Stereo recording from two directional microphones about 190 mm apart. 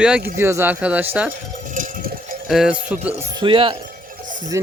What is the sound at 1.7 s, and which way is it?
Cowbell, 45° right (ahead or behind).